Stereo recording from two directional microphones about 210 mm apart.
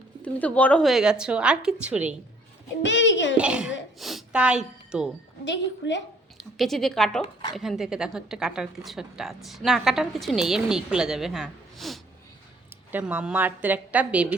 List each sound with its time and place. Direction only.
0.2 s a woman's voice: 5° left (ahead or behind)
2.8 s a child's voice: 60° left (ahead or behind)
3.3 s a woman's voice: 5° right (ahead or behind)
5.5 s a child's voice: 60° left (ahead or behind)
6.3 s a woman's voice: centre (ahead or behind)